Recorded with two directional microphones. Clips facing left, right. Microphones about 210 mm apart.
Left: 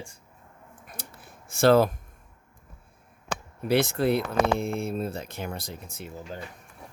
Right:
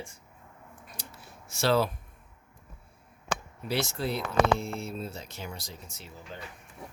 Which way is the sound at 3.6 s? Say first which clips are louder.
Left 9 dB; 55° left (ahead or behind).